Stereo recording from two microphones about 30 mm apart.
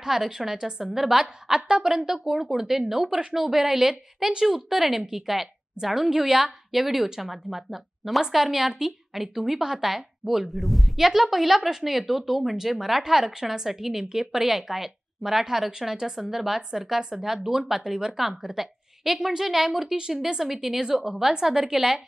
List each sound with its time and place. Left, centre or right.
0.0 s a woman's voice: centre
0.6 s a woman's voice: right
2.6 s a woman's voice: right
2.9 s a woman's voice: centre
9.6 s a woman's voice: centre
9.8 s a woman's voice: centre
11.0 s a woman's voice: centre
21.3 s a woman's voice: centre